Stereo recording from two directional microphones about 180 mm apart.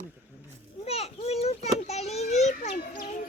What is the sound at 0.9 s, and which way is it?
Children playing, 35° left (ahead or behind).